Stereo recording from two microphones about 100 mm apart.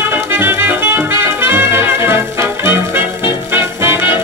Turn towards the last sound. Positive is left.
turn(degrees=-20)  # may be behind; listen again after turning